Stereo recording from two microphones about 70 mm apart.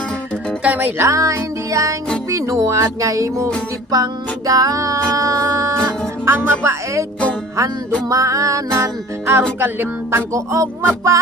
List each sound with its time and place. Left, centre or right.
0.7 s music: right
1.0 s speech: right
3.9 s music: right
6.2 s music: right
8.1 s speech: right
9.4 s music: right
10.3 s speech: right